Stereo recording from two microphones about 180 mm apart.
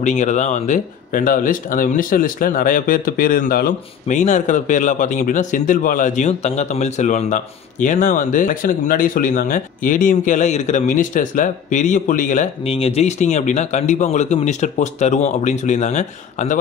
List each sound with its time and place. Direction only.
0.0 s speech: 40° left (ahead or behind)